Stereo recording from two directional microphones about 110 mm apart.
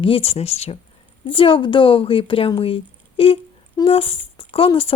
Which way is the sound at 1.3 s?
50° left (ahead or behind).